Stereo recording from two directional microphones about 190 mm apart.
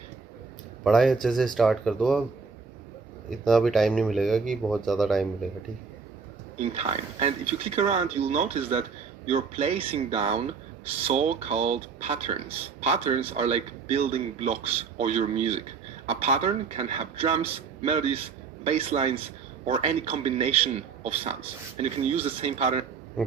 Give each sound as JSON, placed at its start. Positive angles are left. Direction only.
{"t": 0.9, "sound": "speech", "side_deg": 0}
{"t": 3.2, "sound": "speech", "side_deg": 0}
{"t": 6.6, "sound": "speech", "side_deg": -35}